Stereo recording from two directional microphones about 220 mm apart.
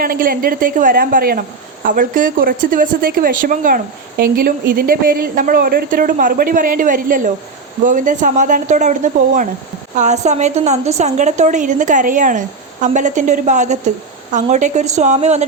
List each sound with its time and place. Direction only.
0.0 s a woman's voice: 40° right (ahead or behind)